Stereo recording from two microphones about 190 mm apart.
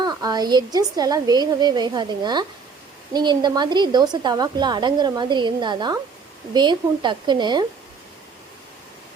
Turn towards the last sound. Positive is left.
turn(degrees=-25)  # may be behind; listen again after turning